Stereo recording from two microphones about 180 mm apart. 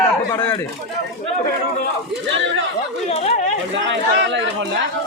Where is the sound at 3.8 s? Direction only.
85° right.